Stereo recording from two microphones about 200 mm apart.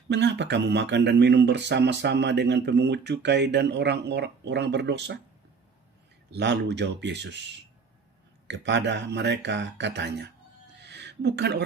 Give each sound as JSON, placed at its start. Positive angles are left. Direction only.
{"t": 0.1, "sound": "speech", "side_deg": -60}
{"t": 6.3, "sound": "speech", "side_deg": -60}
{"t": 8.4, "sound": "speech", "side_deg": -60}
{"t": 10.8, "sound": "a sound", "side_deg": -60}